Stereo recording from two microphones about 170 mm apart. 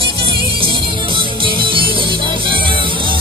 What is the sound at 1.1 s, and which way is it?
Music, 30° right (ahead or behind).